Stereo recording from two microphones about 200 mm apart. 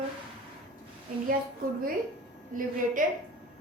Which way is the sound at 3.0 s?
40° right (ahead or behind).